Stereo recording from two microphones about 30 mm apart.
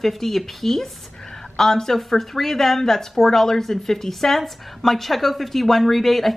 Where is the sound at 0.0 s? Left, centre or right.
Centre.